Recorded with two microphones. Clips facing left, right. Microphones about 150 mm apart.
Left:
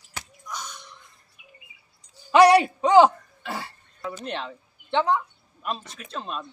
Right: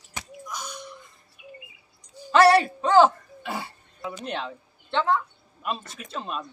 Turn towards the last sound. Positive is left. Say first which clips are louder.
# right 1 dB
turn(degrees=0)  # may be behind; listen again after turning